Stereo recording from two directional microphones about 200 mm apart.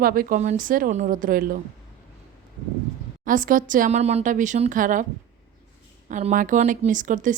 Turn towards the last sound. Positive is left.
turn(degrees=-40)  # may be behind; listen again after turning